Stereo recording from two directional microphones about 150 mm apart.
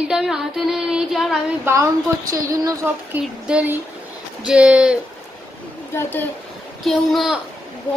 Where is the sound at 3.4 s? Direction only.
10° right (ahead or behind).